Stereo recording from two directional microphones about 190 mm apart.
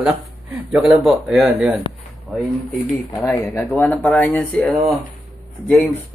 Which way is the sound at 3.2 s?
15° left (ahead or behind).